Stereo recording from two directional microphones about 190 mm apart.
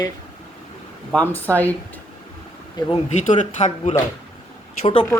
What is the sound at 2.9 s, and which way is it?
Speech, 35° left (ahead or behind).